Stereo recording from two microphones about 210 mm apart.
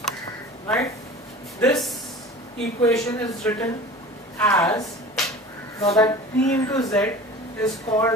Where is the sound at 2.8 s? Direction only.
15° left (ahead or behind).